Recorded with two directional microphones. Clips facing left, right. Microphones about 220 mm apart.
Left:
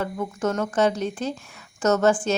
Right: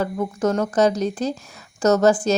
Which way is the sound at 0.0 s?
35° right (ahead or behind).